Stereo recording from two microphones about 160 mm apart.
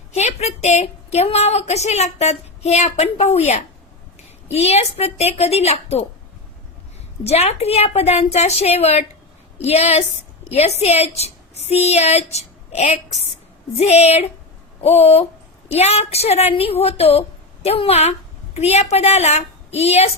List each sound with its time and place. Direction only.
0.2 s a woman's voice: 45° left (ahead or behind)
7.3 s a woman's voice: 40° left (ahead or behind)